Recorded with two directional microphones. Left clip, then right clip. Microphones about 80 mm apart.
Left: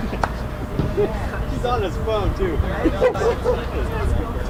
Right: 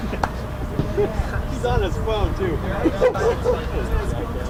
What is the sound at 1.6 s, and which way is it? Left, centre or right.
Speech, left.